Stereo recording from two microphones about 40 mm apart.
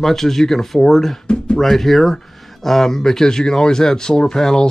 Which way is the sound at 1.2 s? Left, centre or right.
Left.